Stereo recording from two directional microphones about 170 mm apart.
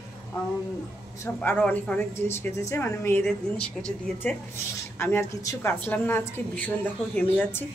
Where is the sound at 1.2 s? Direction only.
10° left (ahead or behind).